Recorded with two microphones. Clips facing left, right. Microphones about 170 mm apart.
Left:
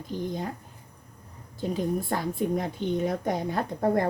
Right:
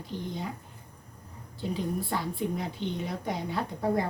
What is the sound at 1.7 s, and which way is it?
A woman's voice, 50° left (ahead or behind).